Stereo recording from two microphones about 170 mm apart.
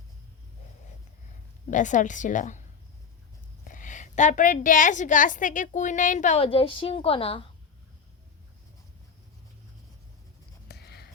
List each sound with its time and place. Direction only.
1.3 s a woman's voice: 45° left (ahead or behind)
10.7 s writing: 70° left (ahead or behind)